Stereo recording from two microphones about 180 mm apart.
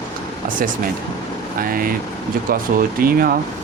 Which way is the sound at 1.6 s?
50° right (ahead or behind).